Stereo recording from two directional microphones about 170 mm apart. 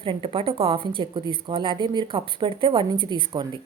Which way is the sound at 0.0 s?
30° right (ahead or behind).